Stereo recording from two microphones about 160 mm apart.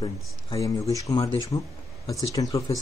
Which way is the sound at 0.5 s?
20° left (ahead or behind).